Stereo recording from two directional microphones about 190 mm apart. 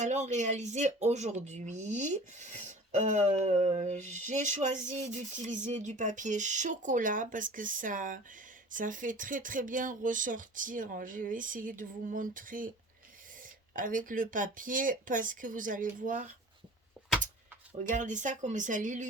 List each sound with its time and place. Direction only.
0.0 s speech: 40° right (ahead or behind)
13.7 s speech: 45° right (ahead or behind)
17.9 s speech: 40° right (ahead or behind)